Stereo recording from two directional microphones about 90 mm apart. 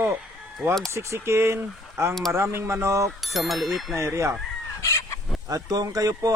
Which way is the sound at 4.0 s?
35° right (ahead or behind).